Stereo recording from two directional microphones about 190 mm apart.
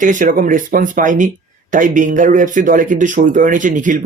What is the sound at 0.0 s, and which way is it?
A man's voice, 40° right (ahead or behind).